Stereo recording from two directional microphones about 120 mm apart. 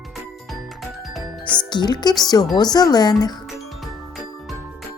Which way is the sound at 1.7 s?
35° left (ahead or behind).